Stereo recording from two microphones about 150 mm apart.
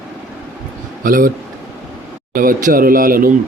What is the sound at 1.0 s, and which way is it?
Speech, 70° right (ahead or behind).